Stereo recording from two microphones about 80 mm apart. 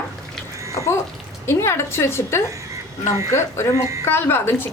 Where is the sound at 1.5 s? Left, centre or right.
Left.